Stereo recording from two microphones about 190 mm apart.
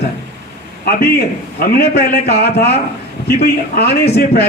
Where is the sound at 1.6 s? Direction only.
55° left (ahead or behind).